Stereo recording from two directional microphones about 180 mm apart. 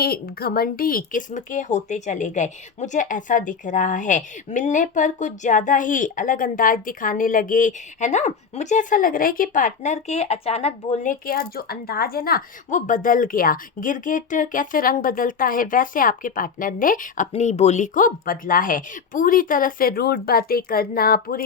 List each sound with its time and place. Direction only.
0.0 s speech: 55° left (ahead or behind)